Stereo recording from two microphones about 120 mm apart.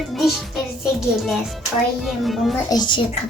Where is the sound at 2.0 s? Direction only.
Centre (ahead or behind).